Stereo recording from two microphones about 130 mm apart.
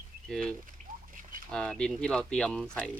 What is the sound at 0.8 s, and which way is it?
Rodents, 65° right (ahead or behind).